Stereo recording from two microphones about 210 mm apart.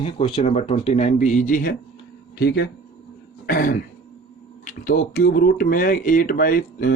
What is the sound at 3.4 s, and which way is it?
Throat clearing, 45° left (ahead or behind).